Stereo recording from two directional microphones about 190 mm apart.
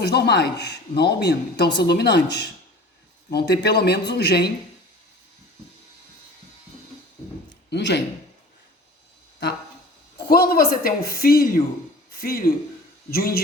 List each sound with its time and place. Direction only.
0.0 s speech: 60° left (ahead or behind)
7.7 s speech: 65° left (ahead or behind)
10.2 s speech: 55° left (ahead or behind)